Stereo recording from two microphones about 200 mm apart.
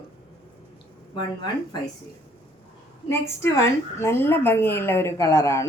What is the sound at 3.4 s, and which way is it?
A woman's voice, 15° left (ahead or behind).